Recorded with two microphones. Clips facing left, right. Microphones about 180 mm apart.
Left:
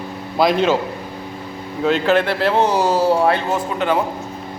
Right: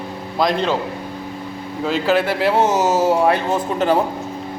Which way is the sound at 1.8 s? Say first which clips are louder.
Left 2 dB; 5° right (ahead or behind).